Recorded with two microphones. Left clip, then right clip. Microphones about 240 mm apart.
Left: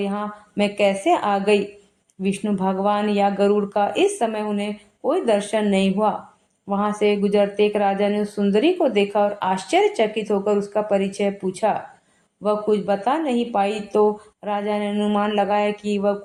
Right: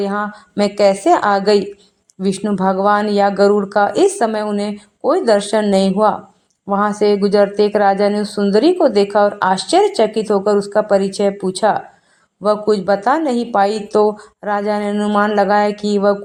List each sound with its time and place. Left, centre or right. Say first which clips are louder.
0.0 s speech: right 7 dB; right
15.7 s speech: right 6 dB; centre